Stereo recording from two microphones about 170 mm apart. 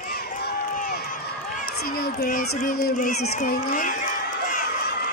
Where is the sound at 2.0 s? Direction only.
60° left (ahead or behind).